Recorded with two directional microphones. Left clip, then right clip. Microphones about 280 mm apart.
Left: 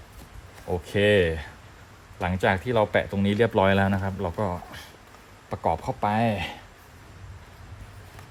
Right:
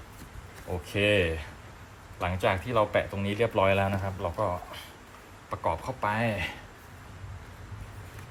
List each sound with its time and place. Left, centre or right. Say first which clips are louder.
0.9 s speech: left 4 dB; left